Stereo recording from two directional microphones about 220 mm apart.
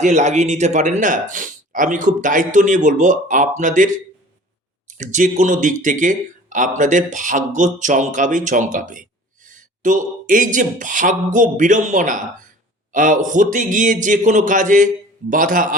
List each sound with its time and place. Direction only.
0.0 s speech: 35° right (ahead or behind)